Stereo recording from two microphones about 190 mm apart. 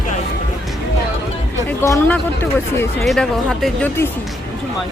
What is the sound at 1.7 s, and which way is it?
Speech, 15° left (ahead or behind).